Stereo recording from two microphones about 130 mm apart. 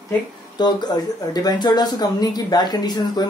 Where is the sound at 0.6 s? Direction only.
35° left (ahead or behind).